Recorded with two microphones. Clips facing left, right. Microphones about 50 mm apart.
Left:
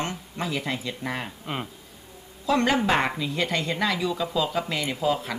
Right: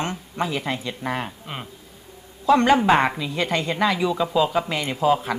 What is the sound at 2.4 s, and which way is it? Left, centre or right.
Speech, centre.